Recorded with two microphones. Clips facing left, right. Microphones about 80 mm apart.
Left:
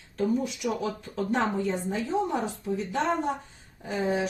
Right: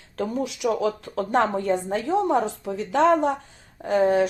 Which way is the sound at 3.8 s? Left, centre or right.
Right.